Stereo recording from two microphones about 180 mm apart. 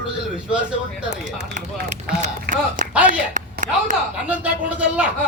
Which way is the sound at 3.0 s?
45° right (ahead or behind).